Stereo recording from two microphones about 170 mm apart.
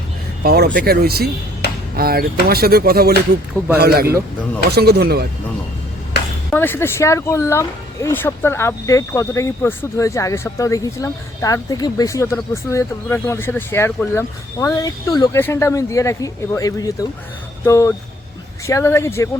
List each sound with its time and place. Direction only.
0.4 s speech: 65° right (ahead or behind)
6.5 s speech: 10° left (ahead or behind)